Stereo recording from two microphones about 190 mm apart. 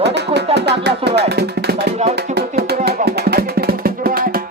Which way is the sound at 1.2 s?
60° right (ahead or behind).